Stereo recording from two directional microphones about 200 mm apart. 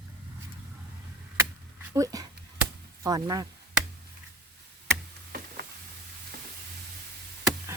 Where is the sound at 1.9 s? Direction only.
15° right (ahead or behind).